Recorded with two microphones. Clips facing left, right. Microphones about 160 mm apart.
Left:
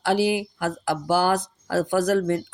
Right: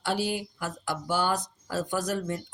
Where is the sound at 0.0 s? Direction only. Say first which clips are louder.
Left 8 dB; 90° left.